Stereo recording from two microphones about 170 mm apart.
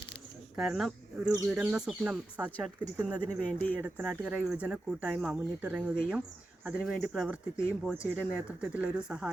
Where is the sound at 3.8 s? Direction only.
10° right (ahead or behind).